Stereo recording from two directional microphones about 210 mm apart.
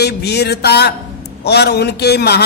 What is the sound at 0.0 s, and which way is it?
Speech, 50° left (ahead or behind).